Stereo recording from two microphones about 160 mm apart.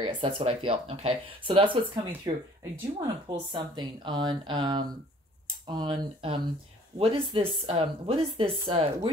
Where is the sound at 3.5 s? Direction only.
30° right (ahead or behind).